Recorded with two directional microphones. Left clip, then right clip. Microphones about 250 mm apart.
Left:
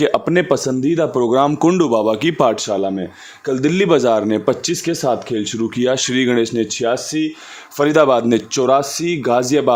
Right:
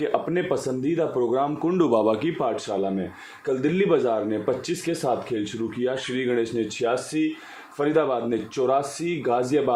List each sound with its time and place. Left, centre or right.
0.0 s speech: left
1.7 s speech: left
2.4 s speech: left